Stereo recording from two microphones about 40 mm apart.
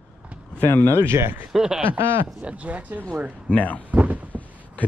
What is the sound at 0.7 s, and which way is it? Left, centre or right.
Speech, left.